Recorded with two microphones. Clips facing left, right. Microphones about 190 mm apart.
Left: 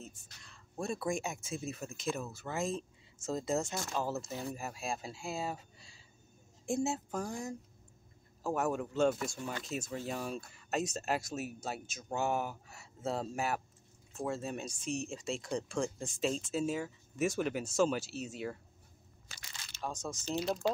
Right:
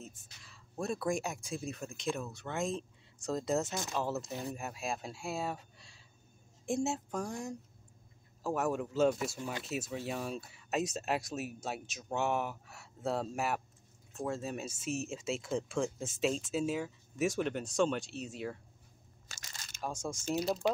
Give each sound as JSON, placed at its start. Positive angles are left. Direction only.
{"t": 0.0, "sound": "speech", "side_deg": 0}
{"t": 19.2, "sound": "a sound", "side_deg": -45}
{"t": 19.8, "sound": "speech", "side_deg": -10}